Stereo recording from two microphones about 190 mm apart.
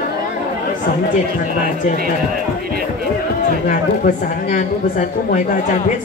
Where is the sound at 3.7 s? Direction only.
40° left (ahead or behind).